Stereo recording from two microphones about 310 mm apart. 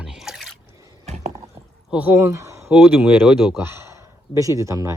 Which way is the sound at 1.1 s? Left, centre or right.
Right.